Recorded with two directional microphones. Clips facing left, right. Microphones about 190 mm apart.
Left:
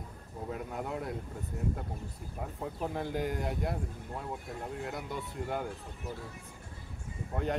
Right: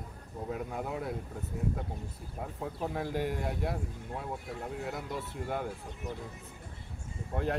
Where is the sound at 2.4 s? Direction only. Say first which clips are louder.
Even; centre (ahead or behind).